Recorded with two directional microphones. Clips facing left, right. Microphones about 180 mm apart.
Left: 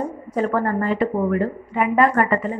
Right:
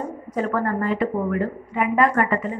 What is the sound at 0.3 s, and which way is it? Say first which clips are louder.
A woman's voice: left 2 dB; 30° left (ahead or behind).